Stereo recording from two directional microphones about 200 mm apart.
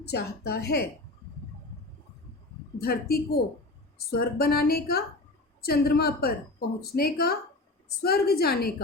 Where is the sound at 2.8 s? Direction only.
50° left (ahead or behind).